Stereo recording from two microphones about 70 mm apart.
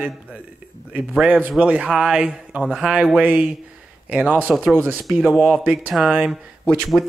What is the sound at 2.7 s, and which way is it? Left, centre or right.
Speech, centre.